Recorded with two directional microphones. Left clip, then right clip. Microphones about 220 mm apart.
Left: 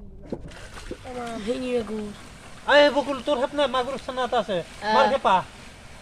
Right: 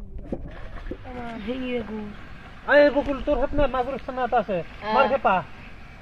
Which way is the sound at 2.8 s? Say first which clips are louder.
Right 1 dB; 15° right (ahead or behind).